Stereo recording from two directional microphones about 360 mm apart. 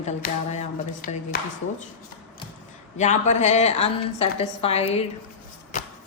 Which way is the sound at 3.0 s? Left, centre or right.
Centre.